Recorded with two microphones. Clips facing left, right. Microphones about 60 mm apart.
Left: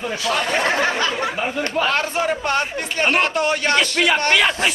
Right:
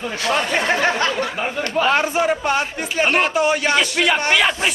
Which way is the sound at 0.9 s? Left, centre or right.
Right.